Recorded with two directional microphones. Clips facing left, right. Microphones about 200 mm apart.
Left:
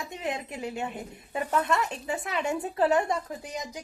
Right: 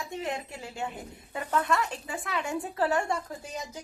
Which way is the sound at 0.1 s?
20° left (ahead or behind).